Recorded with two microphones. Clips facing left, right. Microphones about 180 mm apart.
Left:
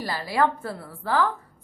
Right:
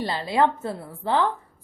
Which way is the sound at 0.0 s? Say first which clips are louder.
Right 2 dB; 25° right (ahead or behind).